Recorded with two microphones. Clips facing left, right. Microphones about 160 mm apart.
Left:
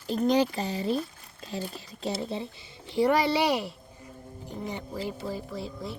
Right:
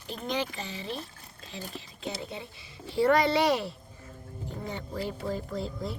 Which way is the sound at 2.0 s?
35° left (ahead or behind).